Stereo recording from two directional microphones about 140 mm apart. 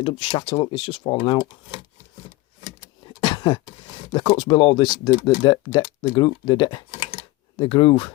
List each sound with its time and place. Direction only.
0.0 s speech: 35° left (ahead or behind)
3.1 s beatboxing: 35° left (ahead or behind)
4.1 s speech: 35° left (ahead or behind)